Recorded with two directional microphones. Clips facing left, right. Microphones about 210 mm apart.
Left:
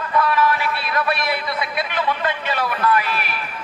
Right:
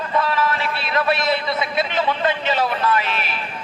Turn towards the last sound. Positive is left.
turn(degrees=-25)  # may be behind; listen again after turning